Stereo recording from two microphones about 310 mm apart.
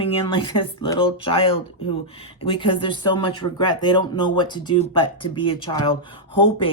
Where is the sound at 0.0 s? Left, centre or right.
Centre.